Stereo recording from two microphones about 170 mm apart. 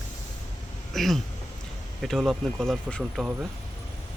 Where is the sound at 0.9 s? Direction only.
Centre (ahead or behind).